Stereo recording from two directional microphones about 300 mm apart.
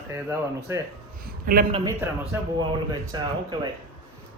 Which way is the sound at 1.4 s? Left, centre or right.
Right.